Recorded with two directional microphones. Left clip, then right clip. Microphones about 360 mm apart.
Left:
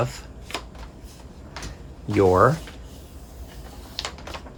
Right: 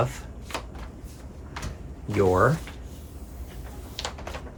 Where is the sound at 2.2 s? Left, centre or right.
Left.